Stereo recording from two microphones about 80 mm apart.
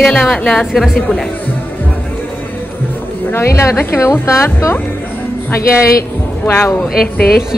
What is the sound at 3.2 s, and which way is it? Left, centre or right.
A woman's voice, left.